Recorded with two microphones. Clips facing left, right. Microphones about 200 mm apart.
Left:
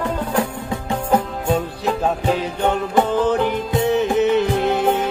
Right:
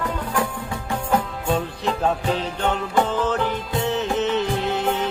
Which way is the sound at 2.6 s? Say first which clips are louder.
Left 4 dB; 15° left (ahead or behind).